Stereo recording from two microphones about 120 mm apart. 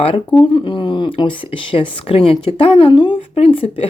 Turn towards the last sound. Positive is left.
turn(degrees=55)  # may be behind; listen again after turning